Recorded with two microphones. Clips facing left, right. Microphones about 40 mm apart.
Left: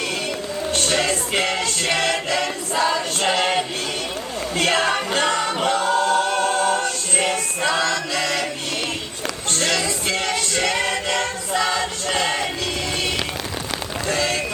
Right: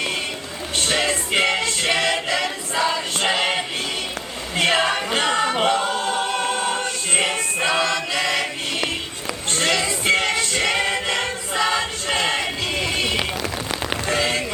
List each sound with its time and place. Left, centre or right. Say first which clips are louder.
0.9 s music: right 3 dB; centre
5.3 s choir: right 1 dB; right
9.5 s choir: right 1 dB; right
13.0 s rain on surface: right 2 dB; right